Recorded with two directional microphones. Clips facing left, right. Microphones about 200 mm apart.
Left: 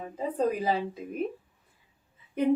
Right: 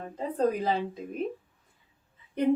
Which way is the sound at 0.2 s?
5° left (ahead or behind).